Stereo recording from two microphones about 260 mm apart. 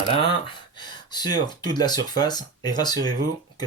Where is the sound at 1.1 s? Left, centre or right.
Centre.